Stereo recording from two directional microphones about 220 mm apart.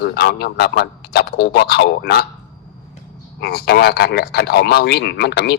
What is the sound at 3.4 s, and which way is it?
A man's voice, 45° left (ahead or behind).